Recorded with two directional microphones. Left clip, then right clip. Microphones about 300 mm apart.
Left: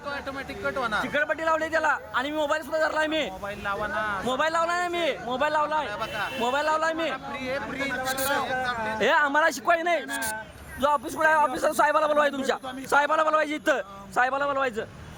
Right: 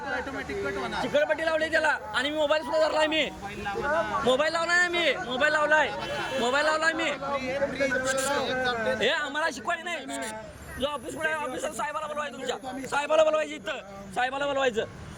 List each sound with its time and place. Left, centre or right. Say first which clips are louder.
0.6 s a man's voice: left 5 dB; centre
11.5 s a man's voice: left 9 dB; left
13.0 s a man's voice: even; centre